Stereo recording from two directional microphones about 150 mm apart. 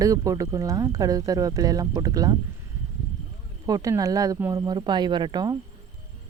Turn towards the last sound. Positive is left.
turn(degrees=-30)  # may be behind; listen again after turning